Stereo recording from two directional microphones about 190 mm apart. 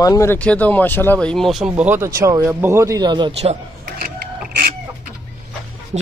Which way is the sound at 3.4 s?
35° right (ahead or behind).